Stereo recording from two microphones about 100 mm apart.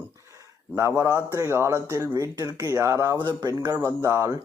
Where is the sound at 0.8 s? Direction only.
25° right (ahead or behind).